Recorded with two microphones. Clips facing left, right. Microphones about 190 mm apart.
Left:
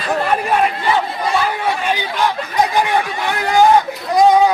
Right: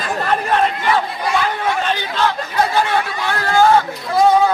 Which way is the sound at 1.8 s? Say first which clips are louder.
Left 1 dB; 10° left (ahead or behind).